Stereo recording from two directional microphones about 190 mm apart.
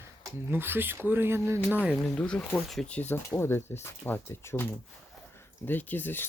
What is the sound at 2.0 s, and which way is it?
Speech, 5° left (ahead or behind).